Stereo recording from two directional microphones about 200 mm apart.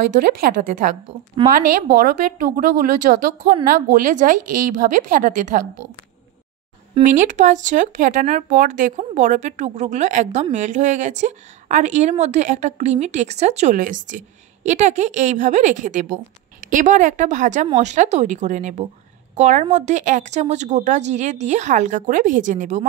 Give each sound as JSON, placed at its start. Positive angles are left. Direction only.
{"t": 0.4, "sound": "a woman's voice", "side_deg": -45}
{"t": 7.0, "sound": "speech", "side_deg": -40}